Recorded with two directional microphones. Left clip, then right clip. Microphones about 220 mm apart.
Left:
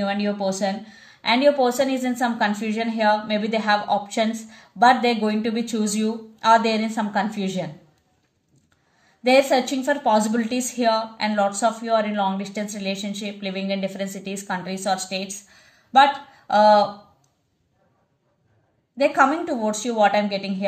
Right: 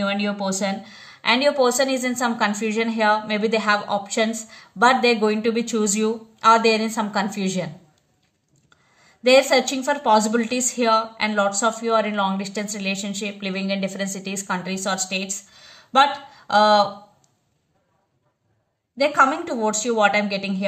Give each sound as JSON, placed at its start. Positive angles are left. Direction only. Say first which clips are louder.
{"t": 0.0, "sound": "a woman's voice", "louder": "even", "side_deg": -35}
{"t": 9.2, "sound": "a woman's voice", "louder": "right 2 dB", "side_deg": -35}
{"t": 19.0, "sound": "a woman's voice", "louder": "even", "side_deg": -35}